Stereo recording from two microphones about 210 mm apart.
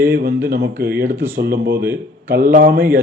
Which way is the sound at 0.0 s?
45° right (ahead or behind).